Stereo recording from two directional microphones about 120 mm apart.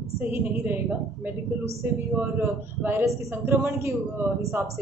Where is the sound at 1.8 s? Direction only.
20° right (ahead or behind).